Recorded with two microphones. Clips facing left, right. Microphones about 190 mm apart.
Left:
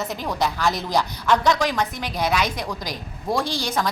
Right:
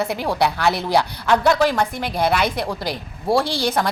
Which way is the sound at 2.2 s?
60° right (ahead or behind).